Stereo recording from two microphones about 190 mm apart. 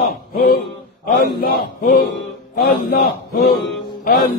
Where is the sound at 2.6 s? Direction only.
45° left (ahead or behind).